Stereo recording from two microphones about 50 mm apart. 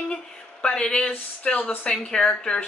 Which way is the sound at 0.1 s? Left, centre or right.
Left.